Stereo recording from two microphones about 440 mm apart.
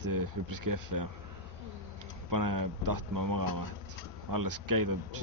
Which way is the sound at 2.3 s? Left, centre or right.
Right.